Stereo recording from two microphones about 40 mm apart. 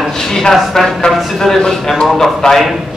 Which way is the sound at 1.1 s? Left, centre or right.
Centre.